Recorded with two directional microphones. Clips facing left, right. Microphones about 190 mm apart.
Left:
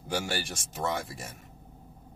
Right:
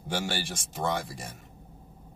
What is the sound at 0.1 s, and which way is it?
Speech, centre (ahead or behind).